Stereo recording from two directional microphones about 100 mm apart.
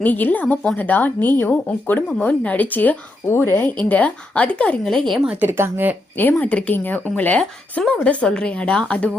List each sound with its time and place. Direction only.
0.0 s a woman's voice: 15° left (ahead or behind)
5.2 s speech: 15° right (ahead or behind)
6.1 s a woman's voice: 20° left (ahead or behind)